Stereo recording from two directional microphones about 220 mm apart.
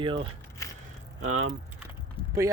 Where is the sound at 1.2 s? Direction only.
65° right (ahead or behind).